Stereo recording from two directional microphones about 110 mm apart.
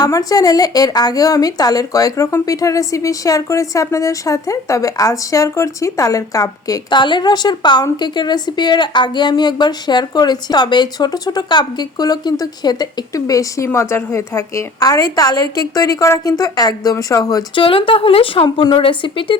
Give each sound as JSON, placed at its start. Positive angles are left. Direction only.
{"t": 0.0, "sound": "a woman's voice", "side_deg": 35}
{"t": 7.0, "sound": "a woman's voice", "side_deg": 45}
{"t": 17.5, "sound": "speech", "side_deg": 50}